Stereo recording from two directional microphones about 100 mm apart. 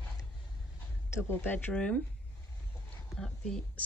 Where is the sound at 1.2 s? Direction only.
20° left (ahead or behind).